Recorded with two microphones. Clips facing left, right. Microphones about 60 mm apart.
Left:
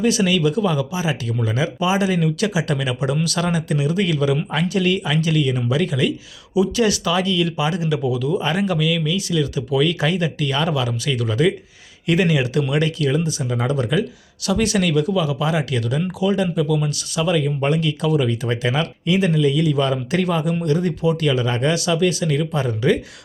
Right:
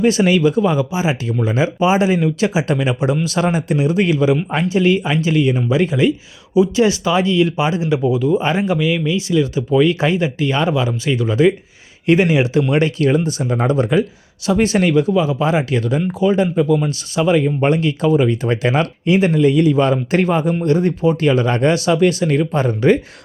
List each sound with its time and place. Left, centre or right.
0.0 s speech: right